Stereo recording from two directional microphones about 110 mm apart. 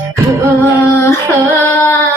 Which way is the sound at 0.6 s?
25° left (ahead or behind).